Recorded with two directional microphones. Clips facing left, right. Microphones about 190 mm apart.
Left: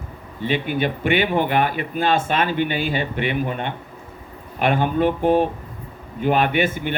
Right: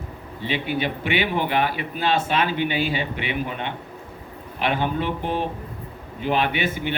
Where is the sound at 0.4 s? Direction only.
50° left (ahead or behind).